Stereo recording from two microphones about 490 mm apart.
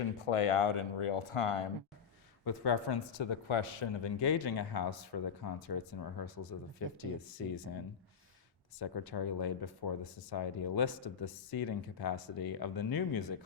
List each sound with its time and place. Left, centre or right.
0.0 s speech: left
2.4 s speech: left
8.8 s speech: left